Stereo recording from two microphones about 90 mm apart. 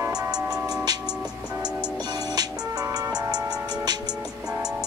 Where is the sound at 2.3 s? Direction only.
45° right (ahead or behind).